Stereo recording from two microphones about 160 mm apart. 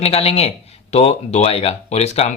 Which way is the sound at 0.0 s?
40° left (ahead or behind).